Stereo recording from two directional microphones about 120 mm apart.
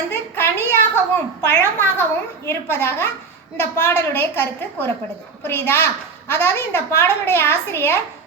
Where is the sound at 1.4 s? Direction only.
20° left (ahead or behind).